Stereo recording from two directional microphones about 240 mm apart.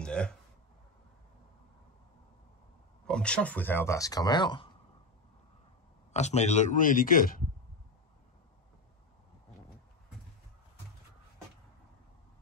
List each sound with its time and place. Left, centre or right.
0.0 s a sound: centre
3.1 s speech: centre
6.1 s a man's voice: left